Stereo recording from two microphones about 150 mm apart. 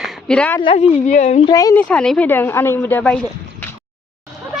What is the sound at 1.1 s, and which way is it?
Speech, 55° left (ahead or behind).